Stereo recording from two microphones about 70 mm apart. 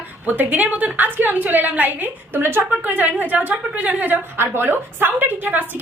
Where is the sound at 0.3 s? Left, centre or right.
Right.